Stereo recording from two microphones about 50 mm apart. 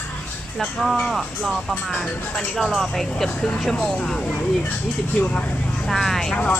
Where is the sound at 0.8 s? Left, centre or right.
Centre.